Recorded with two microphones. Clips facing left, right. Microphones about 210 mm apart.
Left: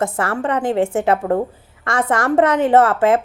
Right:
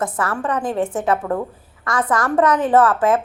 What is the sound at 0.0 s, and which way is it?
A woman's voice, 25° left (ahead or behind).